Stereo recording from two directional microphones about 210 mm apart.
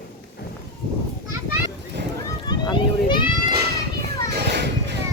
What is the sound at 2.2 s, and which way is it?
Children playing, 20° left (ahead or behind).